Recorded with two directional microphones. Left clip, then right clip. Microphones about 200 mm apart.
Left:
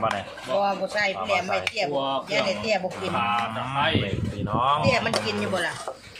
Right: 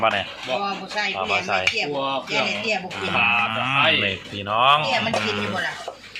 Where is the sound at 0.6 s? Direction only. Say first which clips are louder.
Left 1 dB; 55° left (ahead or behind).